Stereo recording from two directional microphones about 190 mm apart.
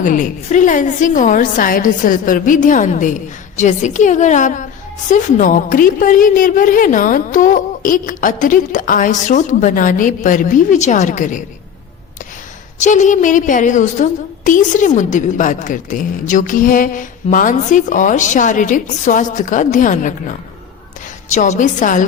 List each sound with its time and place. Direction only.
0.0 s a woman's voice: 45° left (ahead or behind)
12.8 s a woman's voice: 40° left (ahead or behind)
21.3 s a woman's voice: 40° left (ahead or behind)